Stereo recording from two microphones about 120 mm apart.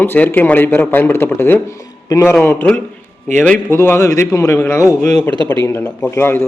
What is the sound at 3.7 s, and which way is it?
A man's voice, 20° left (ahead or behind).